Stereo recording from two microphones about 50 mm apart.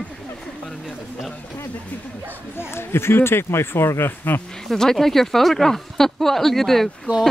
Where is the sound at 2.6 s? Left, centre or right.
Left.